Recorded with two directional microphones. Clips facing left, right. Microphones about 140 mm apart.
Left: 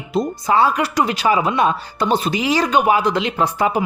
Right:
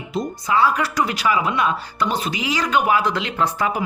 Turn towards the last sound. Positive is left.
turn(degrees=20)  # may be behind; listen again after turning